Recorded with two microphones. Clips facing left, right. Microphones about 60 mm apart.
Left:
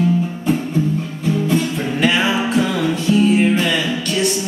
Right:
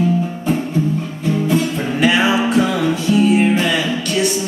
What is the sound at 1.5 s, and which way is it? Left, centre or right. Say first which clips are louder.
Music: right 1 dB; centre.